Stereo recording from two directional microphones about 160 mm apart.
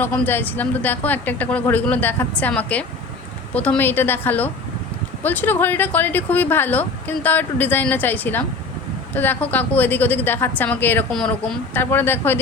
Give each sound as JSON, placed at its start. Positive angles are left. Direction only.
{"t": 0.0, "sound": "speech", "side_deg": 15}